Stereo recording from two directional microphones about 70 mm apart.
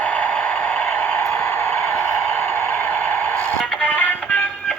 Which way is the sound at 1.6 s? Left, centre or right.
Centre.